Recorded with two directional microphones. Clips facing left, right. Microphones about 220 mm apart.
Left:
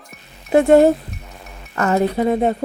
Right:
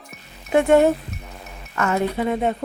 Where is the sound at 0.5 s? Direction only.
35° left (ahead or behind).